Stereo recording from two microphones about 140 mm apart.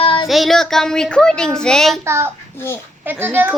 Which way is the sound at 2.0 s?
20° right (ahead or behind).